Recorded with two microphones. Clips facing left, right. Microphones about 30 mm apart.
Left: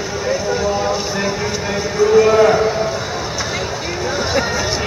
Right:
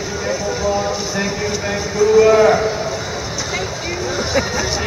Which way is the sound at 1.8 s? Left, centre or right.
Centre.